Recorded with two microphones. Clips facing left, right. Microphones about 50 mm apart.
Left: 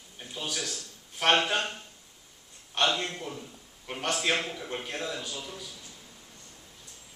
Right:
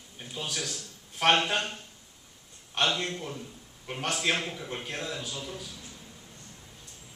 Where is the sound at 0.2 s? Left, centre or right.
Centre.